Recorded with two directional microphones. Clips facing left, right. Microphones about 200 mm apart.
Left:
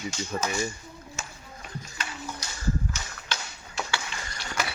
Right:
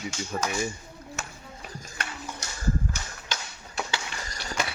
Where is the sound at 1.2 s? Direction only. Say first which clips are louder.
Right 1 dB; 60° right (ahead or behind).